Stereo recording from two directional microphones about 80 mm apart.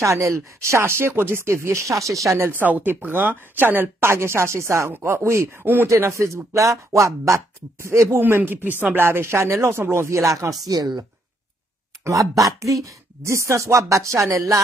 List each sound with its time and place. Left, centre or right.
0.0 s speech: right
2.6 s speech: right
5.9 s speech: right
8.2 s speech: right
10.7 s speech: right
12.0 s speech: right